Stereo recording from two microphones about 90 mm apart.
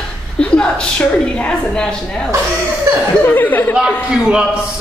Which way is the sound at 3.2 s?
20° left (ahead or behind).